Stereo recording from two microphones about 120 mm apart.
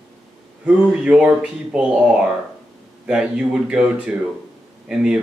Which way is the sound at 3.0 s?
5° right (ahead or behind).